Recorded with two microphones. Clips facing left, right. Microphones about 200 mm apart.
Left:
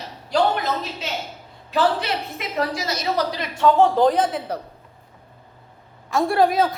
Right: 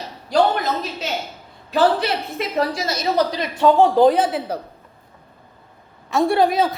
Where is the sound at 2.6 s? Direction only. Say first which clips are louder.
Right 2 dB; 30° right (ahead or behind).